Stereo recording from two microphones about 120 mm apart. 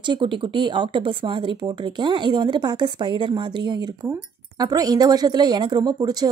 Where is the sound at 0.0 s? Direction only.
40° right (ahead or behind).